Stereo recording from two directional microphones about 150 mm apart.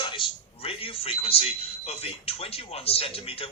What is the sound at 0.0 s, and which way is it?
Speech, 35° left (ahead or behind).